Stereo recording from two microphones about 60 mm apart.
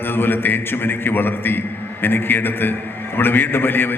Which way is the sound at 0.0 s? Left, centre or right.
Left.